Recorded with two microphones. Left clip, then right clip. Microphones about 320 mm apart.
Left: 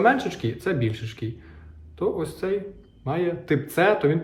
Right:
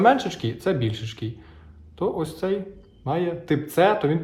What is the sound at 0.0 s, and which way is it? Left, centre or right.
Speech, centre.